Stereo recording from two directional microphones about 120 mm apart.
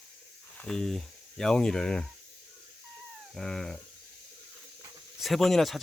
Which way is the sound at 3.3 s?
5° left (ahead or behind).